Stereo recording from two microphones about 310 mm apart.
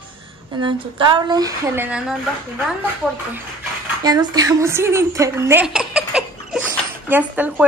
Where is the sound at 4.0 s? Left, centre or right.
Centre.